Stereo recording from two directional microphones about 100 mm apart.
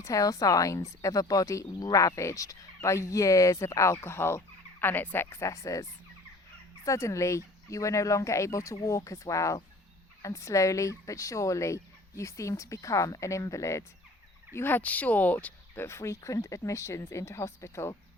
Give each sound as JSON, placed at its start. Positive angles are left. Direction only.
{"t": 0.0, "sound": "speech", "side_deg": 35}